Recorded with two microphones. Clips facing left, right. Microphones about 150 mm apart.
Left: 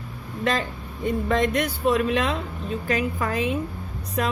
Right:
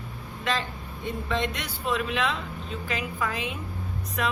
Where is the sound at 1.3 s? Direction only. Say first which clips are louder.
Left 7 dB; 45° left (ahead or behind).